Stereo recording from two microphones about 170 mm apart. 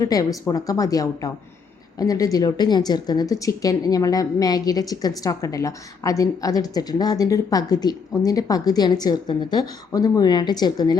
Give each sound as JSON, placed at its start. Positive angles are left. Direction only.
{"t": 0.0, "sound": "speech", "side_deg": 20}